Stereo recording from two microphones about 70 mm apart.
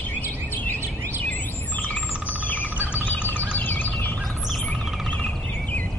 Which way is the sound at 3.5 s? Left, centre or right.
Left.